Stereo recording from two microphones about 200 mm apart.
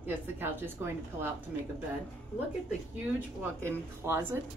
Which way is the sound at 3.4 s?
10° right (ahead or behind).